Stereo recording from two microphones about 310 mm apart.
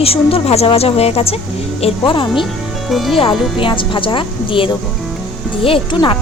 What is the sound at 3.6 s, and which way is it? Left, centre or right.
A woman's voice, centre.